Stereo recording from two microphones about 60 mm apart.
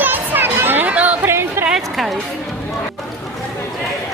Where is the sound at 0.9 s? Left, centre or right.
Right.